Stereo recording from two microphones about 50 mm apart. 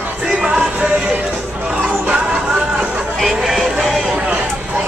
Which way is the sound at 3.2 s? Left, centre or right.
Centre.